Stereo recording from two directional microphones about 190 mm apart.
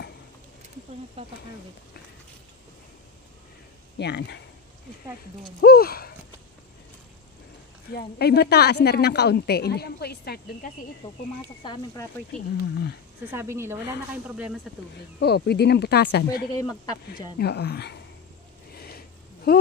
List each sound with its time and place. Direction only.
1.2 s speech: 30° right (ahead or behind)
4.0 s a woman's voice: 60° left (ahead or behind)
5.6 s speech: 55° left (ahead or behind)
7.9 s a woman's voice: 55° left (ahead or behind)
11.6 s speech: 20° left (ahead or behind)
13.3 s speech: 15° right (ahead or behind)
15.1 s a woman's voice: 60° left (ahead or behind)
16.5 s speech: 20° left (ahead or behind)
17.4 s a woman's voice: 60° left (ahead or behind)
18.8 s a sound: 50° left (ahead or behind)